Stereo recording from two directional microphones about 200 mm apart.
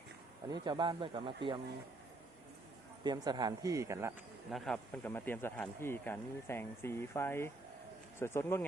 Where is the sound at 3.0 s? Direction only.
20° right (ahead or behind).